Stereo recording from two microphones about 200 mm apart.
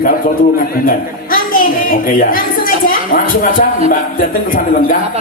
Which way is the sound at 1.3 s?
45° left (ahead or behind).